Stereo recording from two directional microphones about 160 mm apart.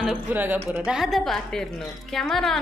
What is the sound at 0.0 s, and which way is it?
A woman's voice, 10° right (ahead or behind).